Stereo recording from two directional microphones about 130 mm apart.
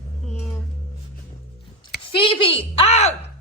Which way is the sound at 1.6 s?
40° left (ahead or behind).